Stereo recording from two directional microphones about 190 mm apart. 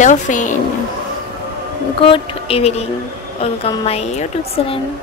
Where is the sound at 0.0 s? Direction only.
40° left (ahead or behind).